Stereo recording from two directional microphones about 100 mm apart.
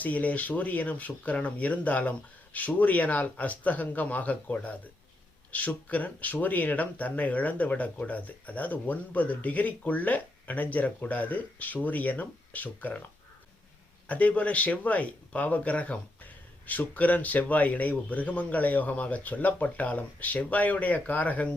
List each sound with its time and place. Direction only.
0.0 s speech: 15° left (ahead or behind)
14.1 s speech: 15° left (ahead or behind)